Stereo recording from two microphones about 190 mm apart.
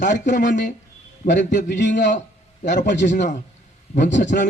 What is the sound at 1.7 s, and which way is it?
Speech, 65° left (ahead or behind).